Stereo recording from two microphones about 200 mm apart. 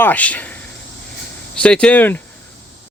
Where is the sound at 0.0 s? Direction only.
5° left (ahead or behind).